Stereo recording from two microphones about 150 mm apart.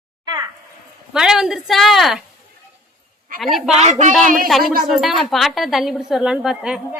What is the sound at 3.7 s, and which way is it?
Speech, 50° right (ahead or behind).